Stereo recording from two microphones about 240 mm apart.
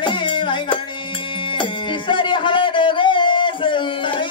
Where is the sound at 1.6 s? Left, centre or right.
Centre.